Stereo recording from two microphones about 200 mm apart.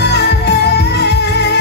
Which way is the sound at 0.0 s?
55° left (ahead or behind).